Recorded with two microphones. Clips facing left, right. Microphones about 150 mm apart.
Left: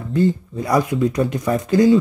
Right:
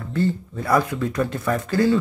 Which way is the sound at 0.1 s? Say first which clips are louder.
Left 5 dB; 15° left (ahead or behind).